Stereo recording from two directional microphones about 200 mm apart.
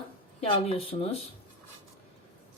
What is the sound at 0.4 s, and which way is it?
Speech, 30° left (ahead or behind).